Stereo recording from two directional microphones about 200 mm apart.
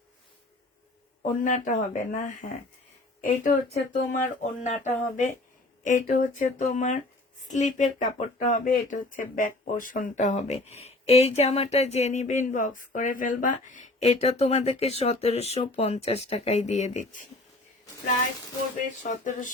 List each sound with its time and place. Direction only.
1.2 s speech: 40° left (ahead or behind)
19.0 s speech: 40° left (ahead or behind)